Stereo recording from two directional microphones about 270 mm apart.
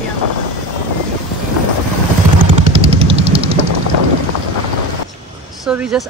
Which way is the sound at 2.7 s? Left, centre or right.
Right.